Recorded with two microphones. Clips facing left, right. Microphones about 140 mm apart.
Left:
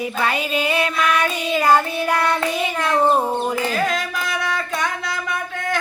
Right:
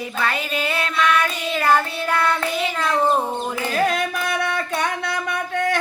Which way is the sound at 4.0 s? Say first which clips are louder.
Right 2 dB; 55° right (ahead or behind).